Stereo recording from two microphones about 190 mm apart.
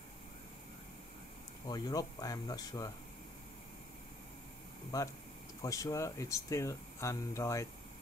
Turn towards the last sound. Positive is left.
turn(degrees=15)  # may be behind; listen again after turning